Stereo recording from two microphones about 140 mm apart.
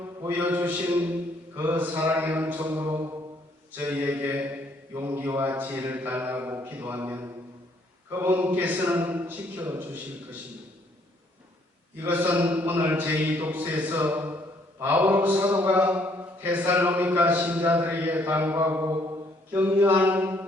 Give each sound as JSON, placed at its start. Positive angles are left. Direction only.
{"t": 0.2, "sound": "a man's voice", "side_deg": -15}
{"t": 2.8, "sound": "mantra", "side_deg": -25}
{"t": 3.8, "sound": "a man's voice", "side_deg": -15}
{"t": 12.0, "sound": "a man's voice", "side_deg": -15}